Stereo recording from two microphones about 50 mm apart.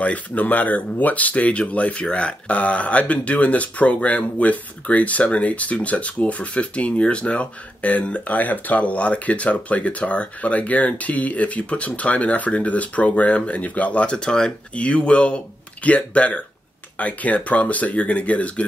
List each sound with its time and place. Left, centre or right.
0.0 s speech: left